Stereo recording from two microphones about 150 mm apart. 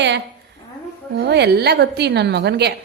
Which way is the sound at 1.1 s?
90° right.